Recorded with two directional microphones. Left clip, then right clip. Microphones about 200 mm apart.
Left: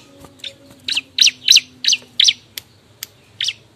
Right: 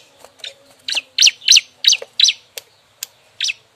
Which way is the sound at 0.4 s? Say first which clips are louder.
Left 1 dB; centre (ahead or behind).